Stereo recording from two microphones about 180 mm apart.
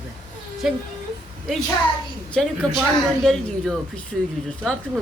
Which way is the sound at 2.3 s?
Centre (ahead or behind).